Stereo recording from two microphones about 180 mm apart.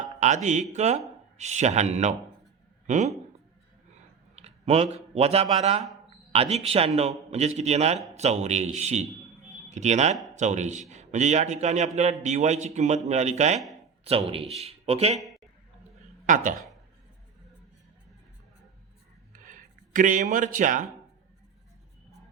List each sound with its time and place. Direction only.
0.0 s music: 40° right (ahead or behind)
0.7 s a man's voice: 40° right (ahead or behind)
4.4 s a sound: 35° right (ahead or behind)
5.1 s a man's voice: 35° right (ahead or behind)
16.2 s speech: 45° right (ahead or behind)
19.4 s a sound: 45° right (ahead or behind)